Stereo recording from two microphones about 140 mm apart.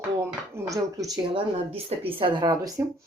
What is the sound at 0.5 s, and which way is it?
Speech, 25° right (ahead or behind).